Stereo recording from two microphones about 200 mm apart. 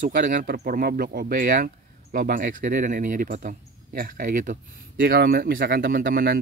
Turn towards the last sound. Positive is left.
turn(degrees=-45)  # may be behind; listen again after turning